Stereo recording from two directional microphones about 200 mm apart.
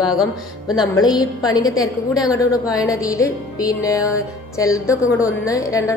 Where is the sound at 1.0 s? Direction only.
20° left (ahead or behind).